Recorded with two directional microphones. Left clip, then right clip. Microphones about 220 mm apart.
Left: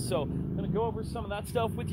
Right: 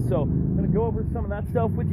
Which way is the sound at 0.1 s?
10° left (ahead or behind).